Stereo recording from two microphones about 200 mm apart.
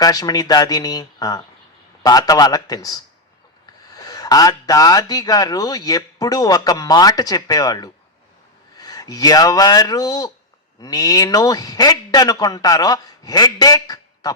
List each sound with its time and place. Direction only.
0.0 s speech: 20° left (ahead or behind)